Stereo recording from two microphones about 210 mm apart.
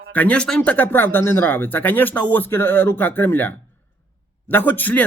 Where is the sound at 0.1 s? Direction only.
5° left (ahead or behind).